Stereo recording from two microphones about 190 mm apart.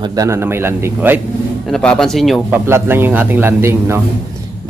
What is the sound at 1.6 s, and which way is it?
Speech, 5° left (ahead or behind).